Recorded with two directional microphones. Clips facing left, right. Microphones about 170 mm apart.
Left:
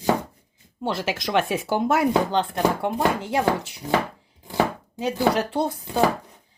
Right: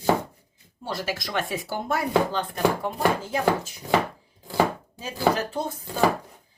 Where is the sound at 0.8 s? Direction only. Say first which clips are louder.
Left 4 dB; 85° left.